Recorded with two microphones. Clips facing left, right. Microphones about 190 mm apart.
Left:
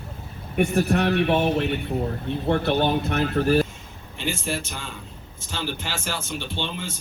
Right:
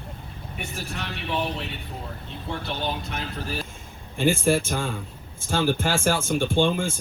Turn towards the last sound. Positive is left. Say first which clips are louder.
# right 9 dB
turn(degrees=-50)  # may be behind; listen again after turning